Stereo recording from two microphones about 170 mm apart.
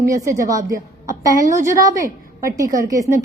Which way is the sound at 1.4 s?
50° right (ahead or behind).